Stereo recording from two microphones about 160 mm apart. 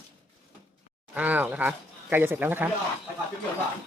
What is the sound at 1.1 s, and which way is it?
Speech, 10° right (ahead or behind).